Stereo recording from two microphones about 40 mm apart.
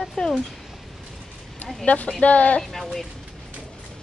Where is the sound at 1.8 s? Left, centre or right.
Left.